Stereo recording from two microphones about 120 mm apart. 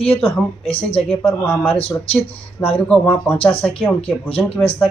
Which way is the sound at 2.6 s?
20° left (ahead or behind).